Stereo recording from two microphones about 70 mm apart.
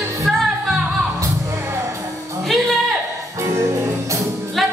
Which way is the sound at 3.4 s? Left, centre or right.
Right.